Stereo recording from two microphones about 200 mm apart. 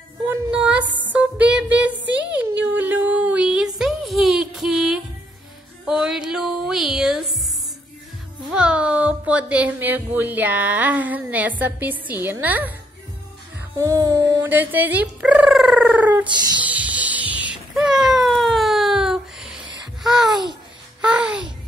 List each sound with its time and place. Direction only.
0.3 s music: 5° right (ahead or behind)
2.8 s a sound: 10° right (ahead or behind)
5.9 s music: 5° right (ahead or behind)
8.5 s speech: 5° right (ahead or behind)
13.7 s a sound: 15° right (ahead or behind)
16.3 s music: 20° right (ahead or behind)
16.6 s music: 5° right (ahead or behind)
21.0 s babbling: 5° right (ahead or behind)